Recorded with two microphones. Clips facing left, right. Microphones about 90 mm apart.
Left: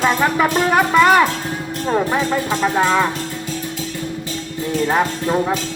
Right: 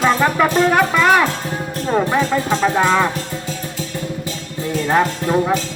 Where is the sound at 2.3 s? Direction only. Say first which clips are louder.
Right 1 dB; centre (ahead or behind).